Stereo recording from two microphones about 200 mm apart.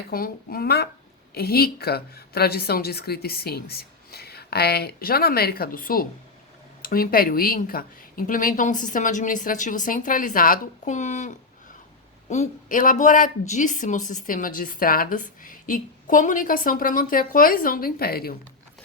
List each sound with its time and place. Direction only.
0.1 s speech: 50° left (ahead or behind)